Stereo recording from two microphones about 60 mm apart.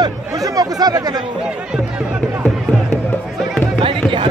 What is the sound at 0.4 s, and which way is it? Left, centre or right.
Chatter, right.